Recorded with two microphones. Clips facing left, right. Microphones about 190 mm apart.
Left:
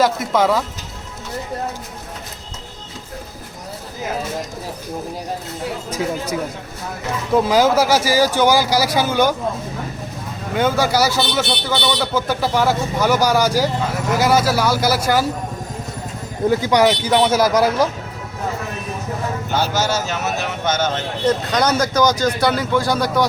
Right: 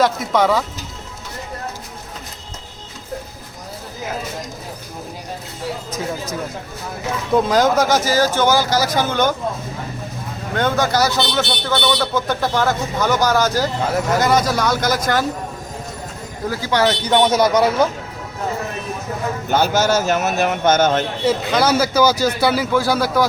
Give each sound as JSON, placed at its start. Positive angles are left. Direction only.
{"t": 0.0, "sound": "speech", "side_deg": 0}
{"t": 7.3, "sound": "speech", "side_deg": 5}
{"t": 10.5, "sound": "speech", "side_deg": 10}
{"t": 16.5, "sound": "speech", "side_deg": 20}
{"t": 19.5, "sound": "a man's voice", "side_deg": -50}
{"t": 21.2, "sound": "speech", "side_deg": -5}